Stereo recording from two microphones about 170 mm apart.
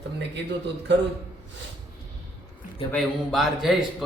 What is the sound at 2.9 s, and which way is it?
Speech, centre (ahead or behind).